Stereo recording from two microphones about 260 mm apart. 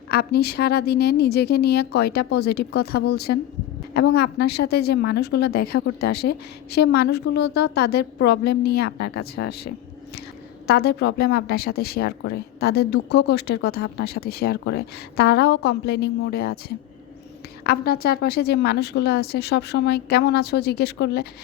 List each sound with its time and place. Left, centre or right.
0.1 s a woman's voice: left
10.7 s a woman's voice: left